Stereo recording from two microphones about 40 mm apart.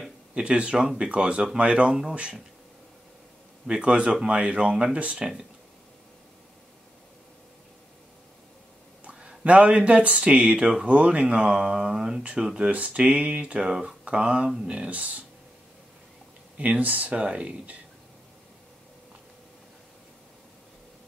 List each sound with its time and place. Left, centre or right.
0.3 s speech: right
1.9 s speech: centre
3.6 s speech: right
9.4 s speech: right
13.6 s speech: centre
14.0 s speech: right
14.9 s speech: right
16.5 s speech: right